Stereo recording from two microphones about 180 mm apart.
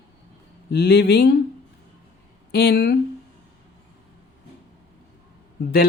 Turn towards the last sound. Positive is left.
turn(degrees=60)  # may be behind; listen again after turning